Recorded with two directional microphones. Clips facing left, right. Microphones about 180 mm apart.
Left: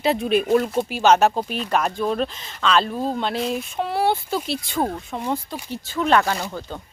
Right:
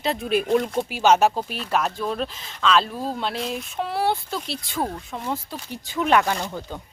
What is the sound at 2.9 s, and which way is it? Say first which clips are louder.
Speech: left 4 dB; 20° left (ahead or behind).